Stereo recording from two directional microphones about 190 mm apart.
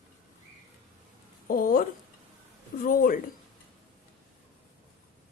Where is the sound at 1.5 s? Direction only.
50° left (ahead or behind).